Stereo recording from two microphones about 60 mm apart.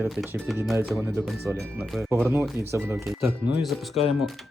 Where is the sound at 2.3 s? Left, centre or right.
Right.